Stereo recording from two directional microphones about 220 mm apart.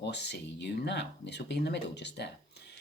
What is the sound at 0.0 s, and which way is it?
Speech, 50° left (ahead or behind).